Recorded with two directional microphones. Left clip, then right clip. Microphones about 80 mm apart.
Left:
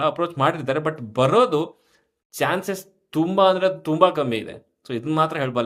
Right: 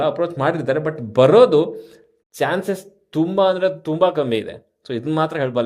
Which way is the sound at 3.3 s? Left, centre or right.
Right.